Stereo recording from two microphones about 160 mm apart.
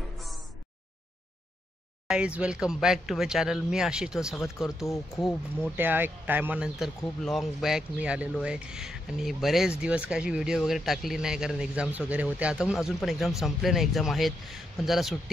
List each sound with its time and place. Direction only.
2.0 s speech: 5° right (ahead or behind)
4.8 s speech: 20° left (ahead or behind)
5.8 s speech: 10° right (ahead or behind)